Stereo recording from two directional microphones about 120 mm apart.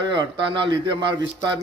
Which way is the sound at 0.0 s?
40° right (ahead or behind).